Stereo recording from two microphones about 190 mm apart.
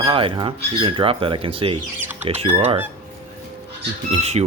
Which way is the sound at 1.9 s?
10° right (ahead or behind).